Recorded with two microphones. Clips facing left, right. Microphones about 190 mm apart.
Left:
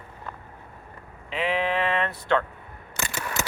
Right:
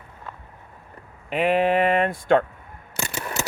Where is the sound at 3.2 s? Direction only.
30° right (ahead or behind).